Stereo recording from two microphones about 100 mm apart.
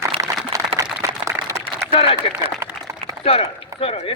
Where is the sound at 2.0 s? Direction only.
75° left (ahead or behind).